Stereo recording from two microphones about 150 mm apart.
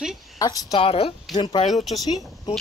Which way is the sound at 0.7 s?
40° left (ahead or behind).